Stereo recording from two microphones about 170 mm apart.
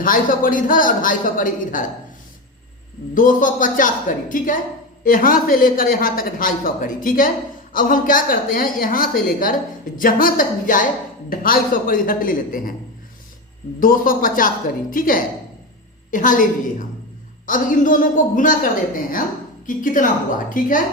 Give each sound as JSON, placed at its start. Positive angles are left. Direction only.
{"t": 0.0, "sound": "speech", "side_deg": 55}
{"t": 3.2, "sound": "a woman's voice", "side_deg": 50}
{"t": 13.7, "sound": "a woman's voice", "side_deg": 55}